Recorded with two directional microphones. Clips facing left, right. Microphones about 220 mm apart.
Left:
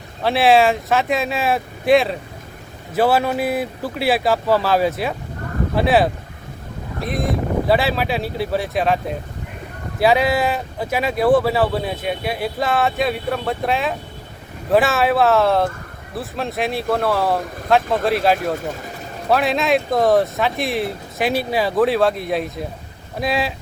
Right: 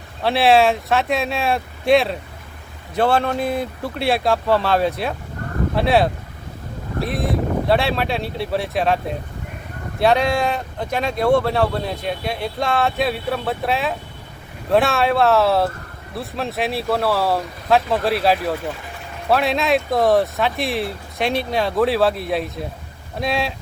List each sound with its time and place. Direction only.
0.2 s speech: centre (ahead or behind)